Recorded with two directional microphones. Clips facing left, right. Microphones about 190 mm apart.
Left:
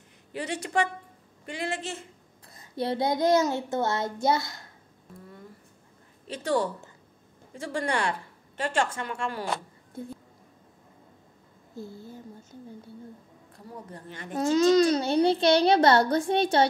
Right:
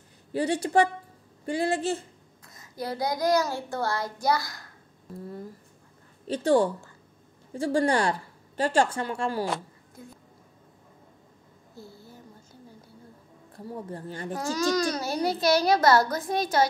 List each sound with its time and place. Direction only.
0.3 s a woman's voice: 35° right (ahead or behind)
2.5 s a child's voice: 30° left (ahead or behind)
6.2 s a woman's voice: 30° right (ahead or behind)
10.0 s a child's voice: 30° left (ahead or behind)
11.7 s a sound: 20° left (ahead or behind)
13.7 s a woman's voice: 30° right (ahead or behind)
14.3 s a child's voice: 20° left (ahead or behind)